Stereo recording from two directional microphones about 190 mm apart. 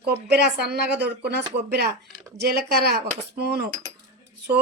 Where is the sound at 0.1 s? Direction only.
60° right (ahead or behind).